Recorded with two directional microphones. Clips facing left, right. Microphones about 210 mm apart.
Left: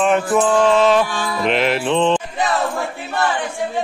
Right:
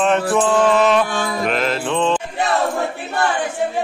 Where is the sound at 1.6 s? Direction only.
20° left (ahead or behind).